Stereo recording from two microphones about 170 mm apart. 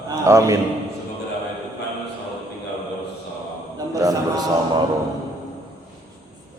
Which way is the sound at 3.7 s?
20° right (ahead or behind).